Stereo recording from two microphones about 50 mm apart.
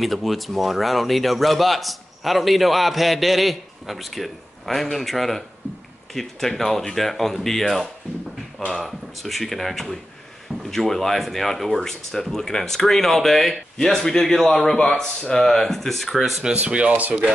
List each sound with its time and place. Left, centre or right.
0.0 s a man's voice: centre
16.6 s speech: right